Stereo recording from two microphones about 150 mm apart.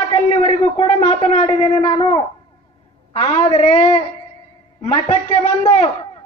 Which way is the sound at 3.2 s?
40° left (ahead or behind).